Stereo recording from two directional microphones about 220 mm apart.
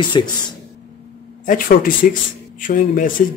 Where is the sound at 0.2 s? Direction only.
20° left (ahead or behind).